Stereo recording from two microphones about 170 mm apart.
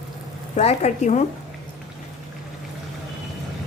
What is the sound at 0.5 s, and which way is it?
Speech, 40° left (ahead or behind).